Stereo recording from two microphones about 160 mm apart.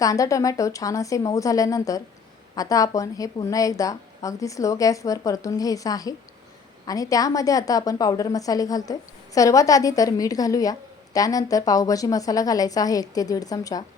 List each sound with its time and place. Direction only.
0.0 s a woman's voice: 20° left (ahead or behind)